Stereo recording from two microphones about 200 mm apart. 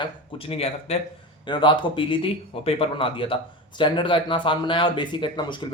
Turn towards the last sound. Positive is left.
turn(degrees=25)  # may be behind; listen again after turning